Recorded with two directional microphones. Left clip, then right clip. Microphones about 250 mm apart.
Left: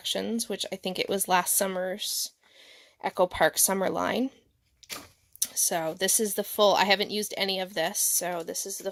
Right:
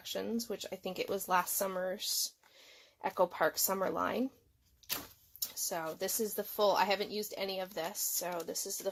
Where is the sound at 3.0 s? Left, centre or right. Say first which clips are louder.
Left 7 dB; left.